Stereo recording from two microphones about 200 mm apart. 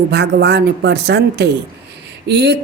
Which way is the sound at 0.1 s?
60° right (ahead or behind).